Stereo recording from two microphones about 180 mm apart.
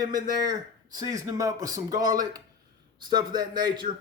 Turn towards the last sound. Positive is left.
turn(degrees=-25)  # may be behind; listen again after turning